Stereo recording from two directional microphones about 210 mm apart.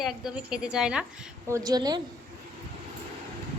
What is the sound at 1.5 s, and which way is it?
Speech, 15° right (ahead or behind).